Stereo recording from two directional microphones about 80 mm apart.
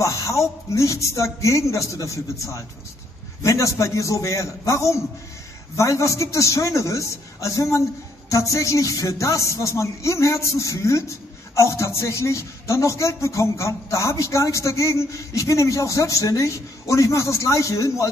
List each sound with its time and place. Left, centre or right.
0.0 s a man's voice: left